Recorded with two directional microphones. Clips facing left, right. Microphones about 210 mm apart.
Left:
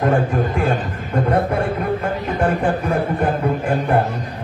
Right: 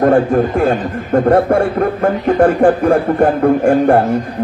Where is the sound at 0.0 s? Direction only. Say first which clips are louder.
Right 7 dB; 45° right (ahead or behind).